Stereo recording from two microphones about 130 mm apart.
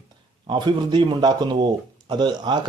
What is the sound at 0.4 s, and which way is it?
Speech, 35° right (ahead or behind).